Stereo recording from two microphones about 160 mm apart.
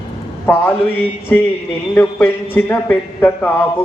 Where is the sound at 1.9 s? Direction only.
15° left (ahead or behind).